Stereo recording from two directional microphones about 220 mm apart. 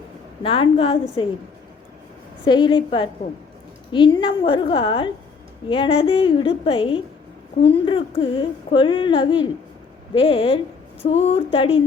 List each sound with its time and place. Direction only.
0.4 s speech: 25° left (ahead or behind)
2.4 s speech: 20° left (ahead or behind)